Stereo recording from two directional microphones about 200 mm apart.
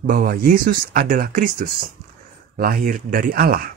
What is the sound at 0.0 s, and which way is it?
Speech, 45° right (ahead or behind).